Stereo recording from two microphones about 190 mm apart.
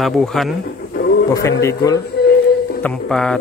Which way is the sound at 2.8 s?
5° left (ahead or behind).